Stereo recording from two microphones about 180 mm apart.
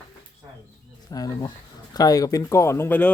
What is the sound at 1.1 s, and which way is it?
Speech, 20° left (ahead or behind).